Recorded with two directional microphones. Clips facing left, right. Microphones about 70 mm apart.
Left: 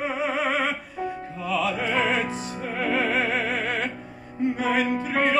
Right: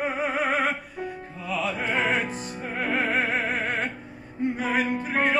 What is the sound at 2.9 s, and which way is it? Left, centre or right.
Music, right.